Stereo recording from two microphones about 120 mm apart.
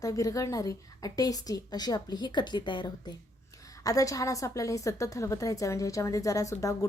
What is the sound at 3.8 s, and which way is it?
Speech, 30° left (ahead or behind).